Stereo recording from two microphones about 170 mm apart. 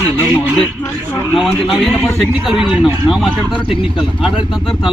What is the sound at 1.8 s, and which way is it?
Speech, centre (ahead or behind).